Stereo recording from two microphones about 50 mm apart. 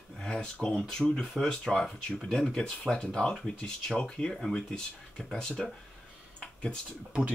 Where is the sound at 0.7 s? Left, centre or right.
Centre.